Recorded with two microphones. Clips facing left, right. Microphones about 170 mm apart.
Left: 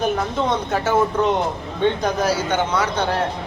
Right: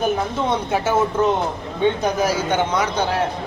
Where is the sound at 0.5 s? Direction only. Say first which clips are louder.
Right 1 dB; 10° right (ahead or behind).